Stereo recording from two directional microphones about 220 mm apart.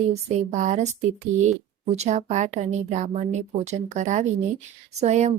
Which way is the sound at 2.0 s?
35° right (ahead or behind).